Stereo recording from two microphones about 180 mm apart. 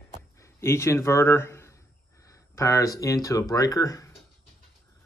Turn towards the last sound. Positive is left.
turn(degrees=20)  # may be behind; listen again after turning